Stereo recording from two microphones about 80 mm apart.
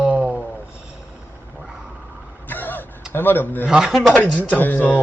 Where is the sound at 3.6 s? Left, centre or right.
Centre.